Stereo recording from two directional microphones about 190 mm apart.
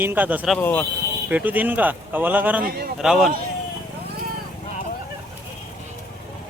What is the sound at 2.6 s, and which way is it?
Speech, 55° right (ahead or behind).